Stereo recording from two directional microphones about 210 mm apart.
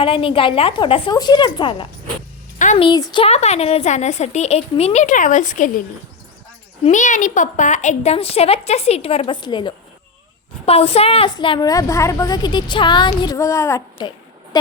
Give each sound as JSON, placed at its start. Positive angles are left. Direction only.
{"t": 0.0, "sound": "a woman's voice", "side_deg": 25}
{"t": 6.8, "sound": "a woman's voice", "side_deg": 35}